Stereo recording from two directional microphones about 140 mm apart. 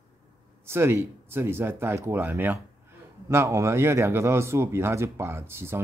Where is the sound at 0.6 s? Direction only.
15° right (ahead or behind).